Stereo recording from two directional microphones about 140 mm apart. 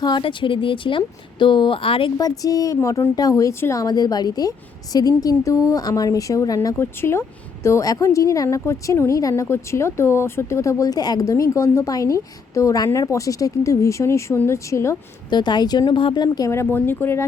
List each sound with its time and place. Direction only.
0.0 s a woman's voice: 35° left (ahead or behind)
2.1 s a woman's voice: 25° left (ahead or behind)
15.3 s a woman's voice: 30° left (ahead or behind); by 17.2 s 15° left (ahead or behind)